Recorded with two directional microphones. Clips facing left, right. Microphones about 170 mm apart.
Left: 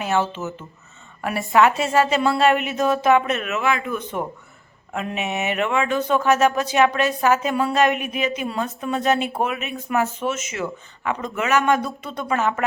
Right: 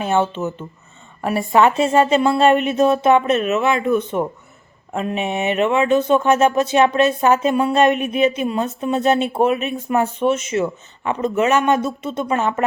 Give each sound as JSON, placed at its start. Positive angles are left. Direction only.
{"t": 0.0, "sound": "speech", "side_deg": -25}